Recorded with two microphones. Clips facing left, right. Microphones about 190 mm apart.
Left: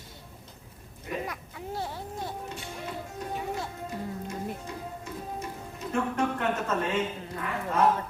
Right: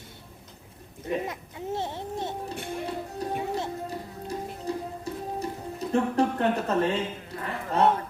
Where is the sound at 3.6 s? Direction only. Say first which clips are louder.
Right 3 dB; 35° right (ahead or behind).